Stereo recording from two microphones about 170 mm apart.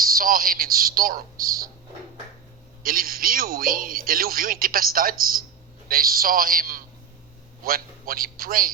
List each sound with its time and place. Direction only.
0.0 s speech: 60° right (ahead or behind)
2.8 s a man's voice: 60° right (ahead or behind)